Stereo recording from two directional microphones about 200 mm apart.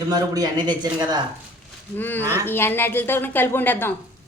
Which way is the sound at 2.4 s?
10° left (ahead or behind).